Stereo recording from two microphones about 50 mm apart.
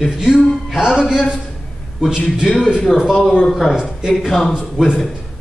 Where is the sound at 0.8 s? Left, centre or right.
Centre.